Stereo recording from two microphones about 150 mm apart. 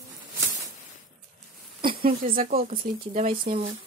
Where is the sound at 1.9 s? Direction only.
75° right (ahead or behind).